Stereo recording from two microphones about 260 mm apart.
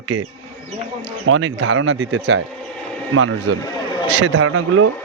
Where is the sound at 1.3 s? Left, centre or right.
Right.